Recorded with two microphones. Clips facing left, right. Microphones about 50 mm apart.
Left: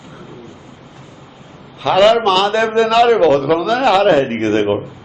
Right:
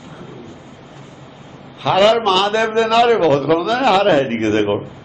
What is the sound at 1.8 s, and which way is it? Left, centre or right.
A man's voice, centre.